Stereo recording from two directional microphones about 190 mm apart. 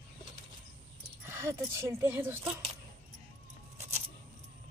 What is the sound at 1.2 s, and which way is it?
Speech, 15° right (ahead or behind).